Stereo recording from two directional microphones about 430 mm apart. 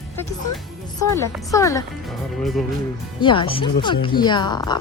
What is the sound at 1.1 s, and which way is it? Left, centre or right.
Speech, centre.